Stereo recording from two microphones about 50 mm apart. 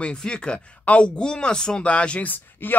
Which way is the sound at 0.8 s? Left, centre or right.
Left.